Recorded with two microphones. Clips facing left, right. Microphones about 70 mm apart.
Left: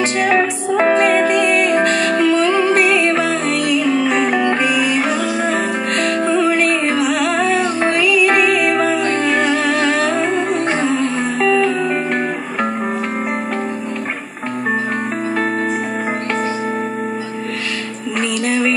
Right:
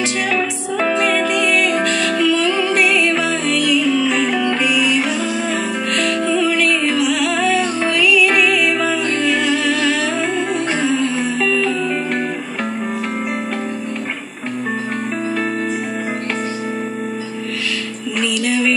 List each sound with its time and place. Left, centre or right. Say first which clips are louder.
0.3 s music: left 5 dB; left
18.4 s music: left 1 dB; left